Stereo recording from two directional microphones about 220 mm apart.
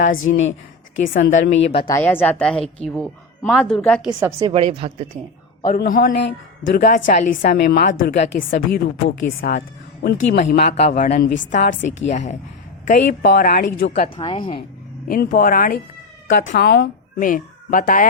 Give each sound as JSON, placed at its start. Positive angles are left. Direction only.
{"t": 0.2, "sound": "speech", "side_deg": 60}
{"t": 1.0, "sound": "a woman's voice", "side_deg": 40}
{"t": 1.6, "sound": "speech", "side_deg": 25}
{"t": 1.9, "sound": "a woman's voice", "side_deg": 10}
{"t": 4.2, "sound": "a woman's voice", "side_deg": -15}
{"t": 4.5, "sound": "a woman's voice", "side_deg": -25}
{"t": 5.6, "sound": "a woman's voice", "side_deg": 40}
{"t": 14.0, "sound": "speech", "side_deg": 25}
{"t": 15.0, "sound": "a woman's voice", "side_deg": 40}